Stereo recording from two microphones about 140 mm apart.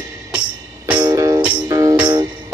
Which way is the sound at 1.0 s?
25° right (ahead or behind).